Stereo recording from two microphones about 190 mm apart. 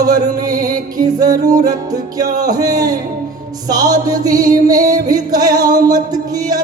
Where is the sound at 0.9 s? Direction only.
20° right (ahead or behind).